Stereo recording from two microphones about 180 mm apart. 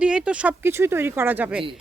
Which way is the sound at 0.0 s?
5° right (ahead or behind).